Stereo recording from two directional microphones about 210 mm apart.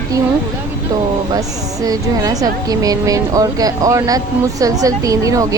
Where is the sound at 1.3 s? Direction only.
15° right (ahead or behind).